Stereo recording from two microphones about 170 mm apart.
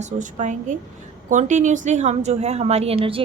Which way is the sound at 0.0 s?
45° right (ahead or behind).